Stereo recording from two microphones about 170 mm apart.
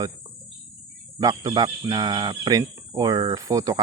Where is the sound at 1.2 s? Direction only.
20° right (ahead or behind).